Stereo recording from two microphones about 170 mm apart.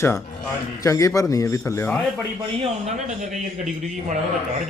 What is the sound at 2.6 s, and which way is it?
Speech, 40° right (ahead or behind).